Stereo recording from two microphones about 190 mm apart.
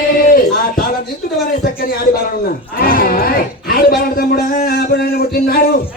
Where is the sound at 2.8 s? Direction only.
50° left (ahead or behind).